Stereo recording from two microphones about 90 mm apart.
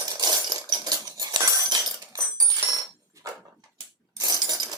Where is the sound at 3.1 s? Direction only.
45° right (ahead or behind).